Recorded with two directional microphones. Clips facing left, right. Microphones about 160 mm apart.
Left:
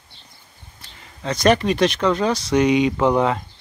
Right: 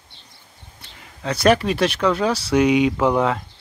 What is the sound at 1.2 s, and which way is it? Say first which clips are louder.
Speech: even; 5° right (ahead or behind).